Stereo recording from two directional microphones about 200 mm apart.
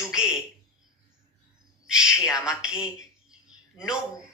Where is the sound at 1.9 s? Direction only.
5° right (ahead or behind).